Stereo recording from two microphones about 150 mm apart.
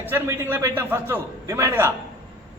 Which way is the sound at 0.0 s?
15° right (ahead or behind).